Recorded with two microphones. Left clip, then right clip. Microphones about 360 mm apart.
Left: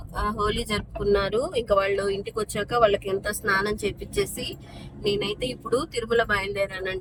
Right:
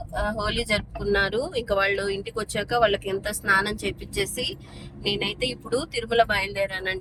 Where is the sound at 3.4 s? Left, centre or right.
Centre.